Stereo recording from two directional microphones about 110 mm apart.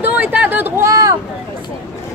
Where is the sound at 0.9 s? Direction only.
30° right (ahead or behind).